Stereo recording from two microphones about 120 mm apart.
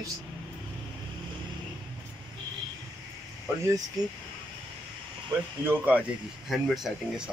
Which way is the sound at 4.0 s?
30° right (ahead or behind).